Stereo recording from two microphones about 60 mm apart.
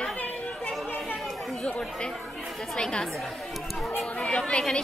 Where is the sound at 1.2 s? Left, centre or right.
Centre.